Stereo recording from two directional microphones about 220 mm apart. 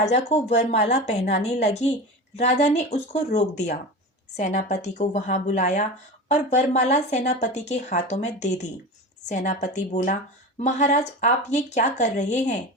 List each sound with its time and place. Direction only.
0.0 s speech: 30° left (ahead or behind)